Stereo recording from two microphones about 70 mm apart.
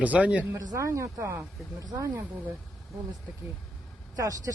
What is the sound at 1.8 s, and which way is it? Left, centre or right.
Speech, right.